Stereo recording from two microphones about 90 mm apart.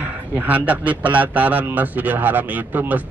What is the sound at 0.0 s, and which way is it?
A man's voice, 20° right (ahead or behind).